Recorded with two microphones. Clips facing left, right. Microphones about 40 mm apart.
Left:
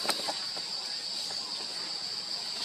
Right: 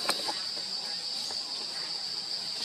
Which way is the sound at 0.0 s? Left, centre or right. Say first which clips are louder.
Even; centre.